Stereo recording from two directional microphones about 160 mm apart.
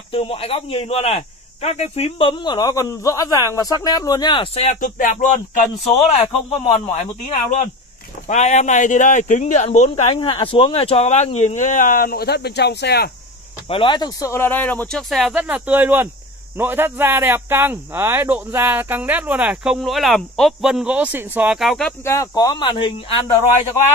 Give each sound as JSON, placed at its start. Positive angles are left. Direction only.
{"t": 0.1, "sound": "speech", "side_deg": 35}
{"t": 10.1, "sound": "speech", "side_deg": 30}
{"t": 13.7, "sound": "a man's voice", "side_deg": 30}
{"t": 22.0, "sound": "speech", "side_deg": 20}